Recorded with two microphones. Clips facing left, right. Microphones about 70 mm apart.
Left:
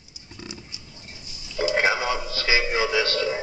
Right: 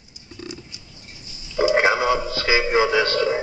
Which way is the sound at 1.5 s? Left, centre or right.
Centre.